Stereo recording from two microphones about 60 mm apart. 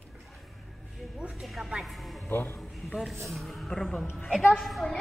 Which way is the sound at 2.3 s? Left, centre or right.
Left.